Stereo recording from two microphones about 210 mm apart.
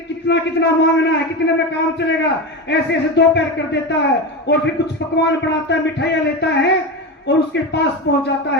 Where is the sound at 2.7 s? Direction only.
55° left (ahead or behind).